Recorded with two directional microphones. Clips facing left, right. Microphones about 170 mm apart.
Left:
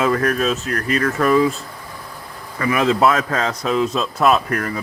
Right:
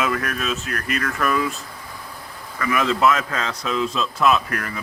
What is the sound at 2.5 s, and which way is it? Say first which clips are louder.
A man's voice: left 4 dB; 35° left (ahead or behind).